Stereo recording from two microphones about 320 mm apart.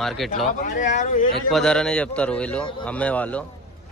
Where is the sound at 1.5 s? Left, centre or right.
Centre.